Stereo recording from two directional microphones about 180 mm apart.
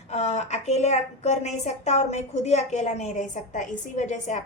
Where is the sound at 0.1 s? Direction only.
35° left (ahead or behind).